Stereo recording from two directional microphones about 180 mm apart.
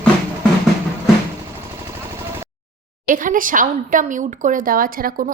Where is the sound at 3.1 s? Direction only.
50° right (ahead or behind).